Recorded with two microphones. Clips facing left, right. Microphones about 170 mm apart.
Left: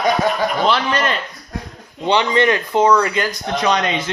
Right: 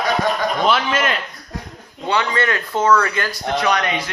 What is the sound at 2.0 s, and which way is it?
Speech, 20° left (ahead or behind).